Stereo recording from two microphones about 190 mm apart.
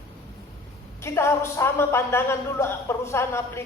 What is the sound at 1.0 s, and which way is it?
A woman's voice, 15° left (ahead or behind).